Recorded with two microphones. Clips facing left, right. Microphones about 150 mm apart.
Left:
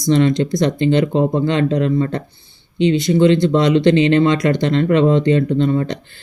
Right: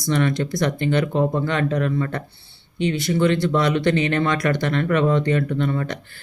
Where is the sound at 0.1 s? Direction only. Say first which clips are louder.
Left 7 dB; 20° left (ahead or behind).